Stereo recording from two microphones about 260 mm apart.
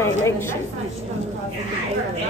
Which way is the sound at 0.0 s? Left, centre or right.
Centre.